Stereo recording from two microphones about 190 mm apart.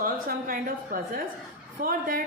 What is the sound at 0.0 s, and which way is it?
A woman's voice, 50° right (ahead or behind).